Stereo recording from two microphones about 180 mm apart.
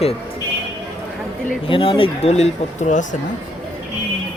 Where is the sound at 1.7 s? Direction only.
30° left (ahead or behind).